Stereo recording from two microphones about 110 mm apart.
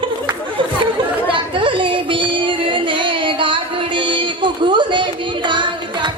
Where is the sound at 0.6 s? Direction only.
50° right (ahead or behind).